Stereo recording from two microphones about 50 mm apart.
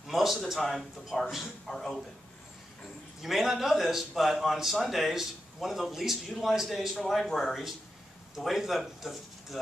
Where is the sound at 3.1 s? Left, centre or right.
Centre.